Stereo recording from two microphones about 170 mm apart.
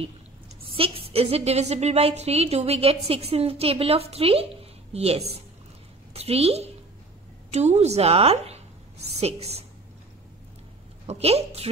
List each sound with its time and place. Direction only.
0.7 s a woman's voice: 35° right (ahead or behind)
11.1 s a woman's voice: 35° right (ahead or behind)